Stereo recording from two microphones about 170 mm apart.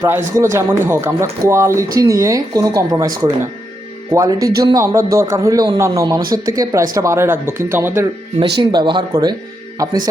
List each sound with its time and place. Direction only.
0.0 s speech: 15° right (ahead or behind)
4.1 s speech: 20° right (ahead or behind)
8.4 s speech: 30° right (ahead or behind)